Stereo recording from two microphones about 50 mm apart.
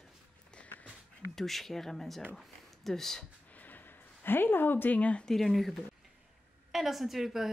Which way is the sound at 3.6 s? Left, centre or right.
Left.